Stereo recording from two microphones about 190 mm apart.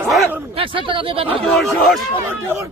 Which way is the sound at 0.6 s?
25° right (ahead or behind).